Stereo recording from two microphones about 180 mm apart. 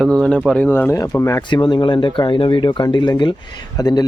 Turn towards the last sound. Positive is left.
turn(degrees=20)  # may be behind; listen again after turning